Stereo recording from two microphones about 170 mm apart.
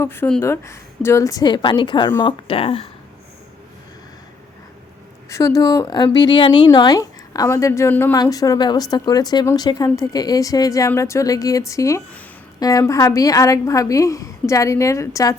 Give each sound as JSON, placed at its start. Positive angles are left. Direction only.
{"t": 0.0, "sound": "a woman's voice", "side_deg": 15}
{"t": 5.3, "sound": "a woman's voice", "side_deg": 20}